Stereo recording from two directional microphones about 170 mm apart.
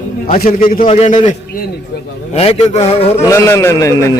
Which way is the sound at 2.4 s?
40° left (ahead or behind).